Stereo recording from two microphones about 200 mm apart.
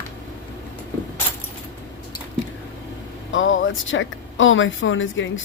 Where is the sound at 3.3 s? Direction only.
75° left (ahead or behind).